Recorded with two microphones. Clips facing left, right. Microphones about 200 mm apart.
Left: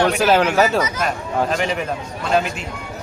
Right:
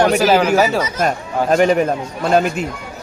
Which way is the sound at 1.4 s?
45° right (ahead or behind).